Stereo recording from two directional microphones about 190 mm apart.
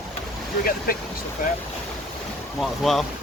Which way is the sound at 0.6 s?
50° left (ahead or behind).